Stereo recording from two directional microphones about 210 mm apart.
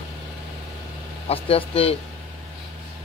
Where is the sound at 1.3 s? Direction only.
25° left (ahead or behind).